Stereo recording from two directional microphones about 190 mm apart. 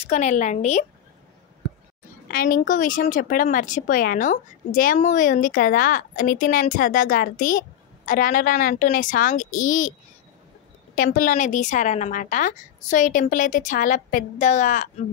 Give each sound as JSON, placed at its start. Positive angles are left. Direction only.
{"t": 0.0, "sound": "a woman's voice", "side_deg": 40}
{"t": 2.2, "sound": "a woman's voice", "side_deg": 50}
{"t": 11.0, "sound": "a woman's voice", "side_deg": 45}